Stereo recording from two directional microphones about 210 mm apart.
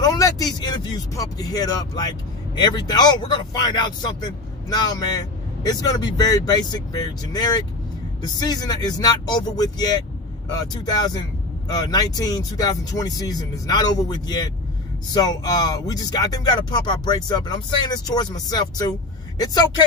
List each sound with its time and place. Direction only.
0.0 s speech: 15° left (ahead or behind)